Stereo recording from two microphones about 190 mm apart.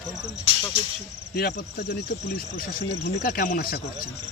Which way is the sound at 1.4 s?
50° left (ahead or behind).